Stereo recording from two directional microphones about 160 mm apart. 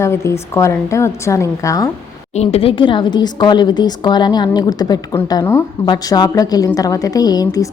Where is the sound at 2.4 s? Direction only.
40° left (ahead or behind).